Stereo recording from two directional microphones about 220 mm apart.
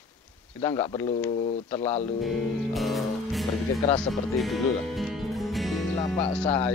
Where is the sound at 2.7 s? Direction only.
Centre (ahead or behind).